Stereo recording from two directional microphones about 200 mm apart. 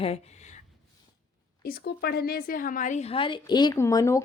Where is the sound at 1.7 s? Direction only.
50° left (ahead or behind).